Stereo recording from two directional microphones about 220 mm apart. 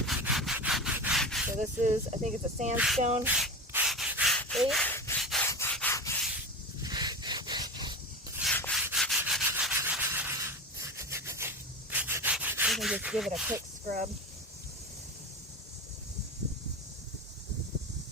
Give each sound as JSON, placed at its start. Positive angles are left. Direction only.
{"t": 0.2, "sound": "wood", "side_deg": 0}
{"t": 1.5, "sound": "speech", "side_deg": -30}
{"t": 2.7, "sound": "speech", "side_deg": 0}
{"t": 3.0, "sound": "speech", "side_deg": -35}
{"t": 3.2, "sound": "rub", "side_deg": -5}
{"t": 5.2, "sound": "rub", "side_deg": 0}
{"t": 5.5, "sound": "rub", "side_deg": 10}
{"t": 6.8, "sound": "sawing", "side_deg": -20}
{"t": 8.5, "sound": "rub", "side_deg": 5}
{"t": 13.8, "sound": "speech", "side_deg": -40}